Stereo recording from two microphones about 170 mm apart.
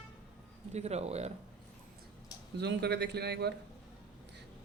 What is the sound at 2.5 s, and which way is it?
Speech, 80° right.